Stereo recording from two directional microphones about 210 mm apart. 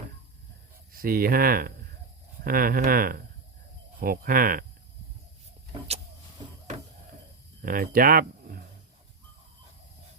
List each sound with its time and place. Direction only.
0.9 s speech: 45° right (ahead or behind)
7.6 s speech: 40° right (ahead or behind)